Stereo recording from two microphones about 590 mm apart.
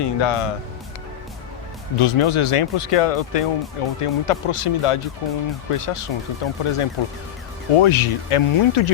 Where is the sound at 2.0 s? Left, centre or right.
Left.